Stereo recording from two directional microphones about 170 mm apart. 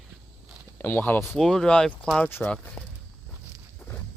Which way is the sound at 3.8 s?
5° left (ahead or behind).